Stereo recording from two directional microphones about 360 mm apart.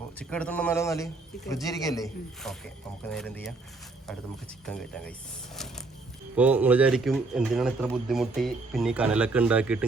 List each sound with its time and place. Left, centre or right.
0.2 s a man's voice: centre
4.6 s speech: centre
6.3 s speech: centre